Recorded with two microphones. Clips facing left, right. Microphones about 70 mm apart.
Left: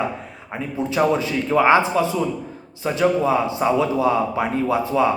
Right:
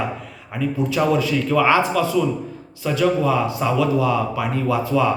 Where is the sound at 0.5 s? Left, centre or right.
Left.